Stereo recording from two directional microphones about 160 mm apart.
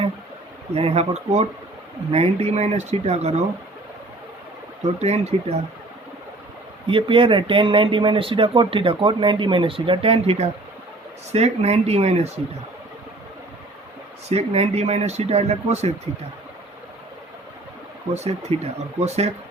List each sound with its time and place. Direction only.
0.7 s speech: 40° right (ahead or behind)
4.9 s speech: 40° right (ahead or behind)
6.8 s speech: 35° right (ahead or behind)
14.3 s speech: 40° right (ahead or behind)
18.1 s speech: 40° right (ahead or behind)